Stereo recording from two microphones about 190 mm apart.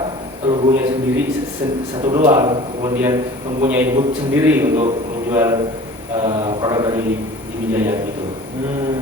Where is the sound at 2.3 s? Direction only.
20° right (ahead or behind).